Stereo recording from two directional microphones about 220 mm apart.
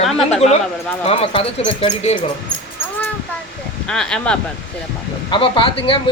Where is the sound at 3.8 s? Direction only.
5° left (ahead or behind).